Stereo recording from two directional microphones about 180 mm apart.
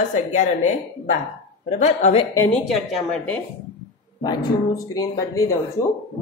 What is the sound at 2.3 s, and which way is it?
Speech, 10° left (ahead or behind).